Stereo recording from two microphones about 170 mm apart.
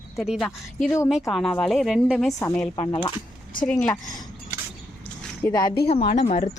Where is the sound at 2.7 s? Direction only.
25° left (ahead or behind).